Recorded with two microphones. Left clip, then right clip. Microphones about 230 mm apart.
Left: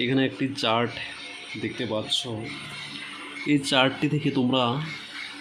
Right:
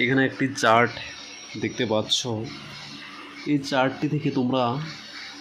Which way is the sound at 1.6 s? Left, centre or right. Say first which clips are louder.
Right 5 dB; centre.